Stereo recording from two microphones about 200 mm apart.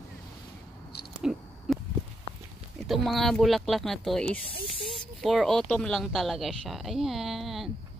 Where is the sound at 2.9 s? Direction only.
Centre (ahead or behind).